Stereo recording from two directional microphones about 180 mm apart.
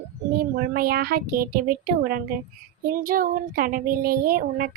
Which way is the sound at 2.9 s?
50° right (ahead or behind).